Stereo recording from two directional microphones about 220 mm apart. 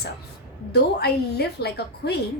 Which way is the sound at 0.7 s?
50° left (ahead or behind).